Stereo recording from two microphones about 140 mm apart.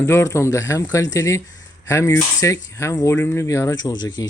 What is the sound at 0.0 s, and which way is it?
Speech, 20° left (ahead or behind).